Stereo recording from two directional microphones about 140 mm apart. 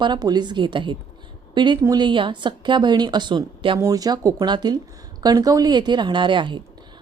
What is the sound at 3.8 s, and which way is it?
A woman's voice, 25° right (ahead or behind).